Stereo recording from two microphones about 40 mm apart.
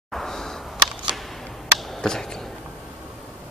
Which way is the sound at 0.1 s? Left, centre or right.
Centre.